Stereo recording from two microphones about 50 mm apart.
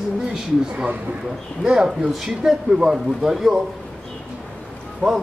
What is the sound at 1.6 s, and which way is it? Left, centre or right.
A man's voice, centre.